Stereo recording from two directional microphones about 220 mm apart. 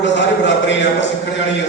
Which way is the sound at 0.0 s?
55° left (ahead or behind).